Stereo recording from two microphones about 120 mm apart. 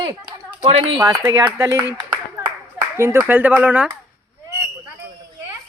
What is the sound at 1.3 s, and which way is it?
Speech, 30° right (ahead or behind).